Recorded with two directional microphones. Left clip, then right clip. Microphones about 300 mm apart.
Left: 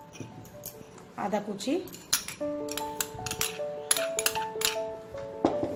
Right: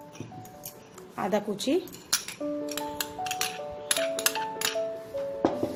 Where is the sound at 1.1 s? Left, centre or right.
Right.